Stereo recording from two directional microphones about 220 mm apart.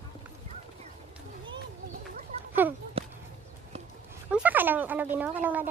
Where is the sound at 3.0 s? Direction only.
25° right (ahead or behind).